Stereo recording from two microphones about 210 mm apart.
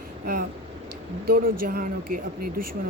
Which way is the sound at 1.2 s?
45° right (ahead or behind).